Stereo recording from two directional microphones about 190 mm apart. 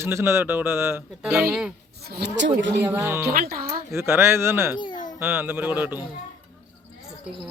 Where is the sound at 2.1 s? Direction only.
60° right (ahead or behind).